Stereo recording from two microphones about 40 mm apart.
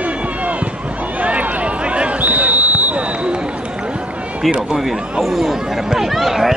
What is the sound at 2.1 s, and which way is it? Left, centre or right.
Basketball bounce, right.